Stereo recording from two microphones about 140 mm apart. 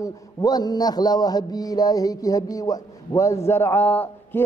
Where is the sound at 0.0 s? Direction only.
25° left (ahead or behind).